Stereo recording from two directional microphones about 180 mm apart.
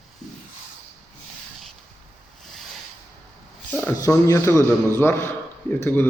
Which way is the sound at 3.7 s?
15° left (ahead or behind).